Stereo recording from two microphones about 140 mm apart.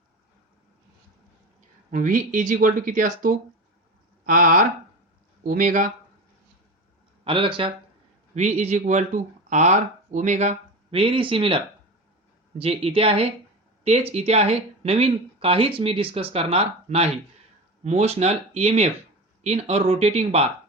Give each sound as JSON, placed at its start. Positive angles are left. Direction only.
{"t": 1.9, "sound": "speech", "side_deg": -70}
{"t": 7.3, "sound": "speech", "side_deg": -40}
{"t": 8.4, "sound": "speech", "side_deg": -55}
{"t": 11.0, "sound": "speech", "side_deg": -40}